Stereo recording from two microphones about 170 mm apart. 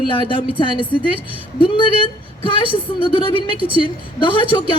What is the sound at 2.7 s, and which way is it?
A woman's voice, 30° left (ahead or behind).